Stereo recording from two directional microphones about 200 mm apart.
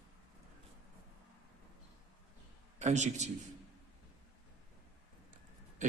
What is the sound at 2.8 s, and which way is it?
Speech, 35° right (ahead or behind).